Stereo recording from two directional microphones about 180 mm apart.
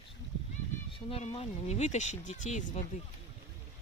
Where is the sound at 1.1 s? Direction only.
35° left (ahead or behind).